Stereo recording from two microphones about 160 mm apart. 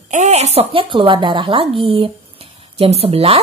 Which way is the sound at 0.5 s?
30° right (ahead or behind).